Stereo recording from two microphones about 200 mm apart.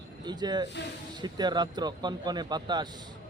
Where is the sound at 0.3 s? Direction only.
20° right (ahead or behind).